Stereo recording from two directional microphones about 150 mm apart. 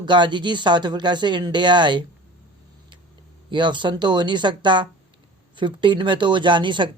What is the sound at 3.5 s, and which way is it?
Speech, 30° right (ahead or behind).